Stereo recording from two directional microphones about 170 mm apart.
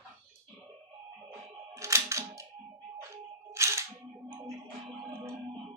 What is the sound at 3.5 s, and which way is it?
Single-lens reflex camera, 15° right (ahead or behind).